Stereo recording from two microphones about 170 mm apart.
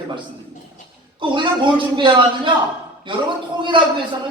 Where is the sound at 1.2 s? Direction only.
30° right (ahead or behind).